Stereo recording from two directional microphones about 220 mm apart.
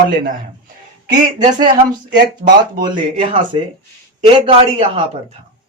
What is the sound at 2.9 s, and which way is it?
Speech, 20° right (ahead or behind).